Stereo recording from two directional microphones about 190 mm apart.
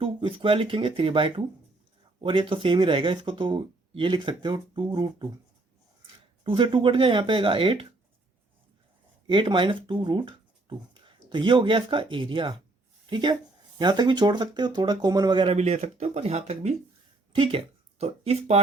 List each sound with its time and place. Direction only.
0.0 s speech: 30° right (ahead or behind)
6.4 s speech: 25° right (ahead or behind)
9.2 s speech: 25° right (ahead or behind)